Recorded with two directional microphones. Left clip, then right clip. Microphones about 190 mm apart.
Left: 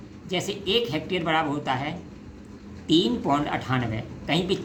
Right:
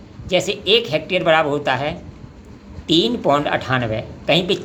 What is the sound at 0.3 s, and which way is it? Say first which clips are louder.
Speech: right 10 dB; 30° right (ahead or behind).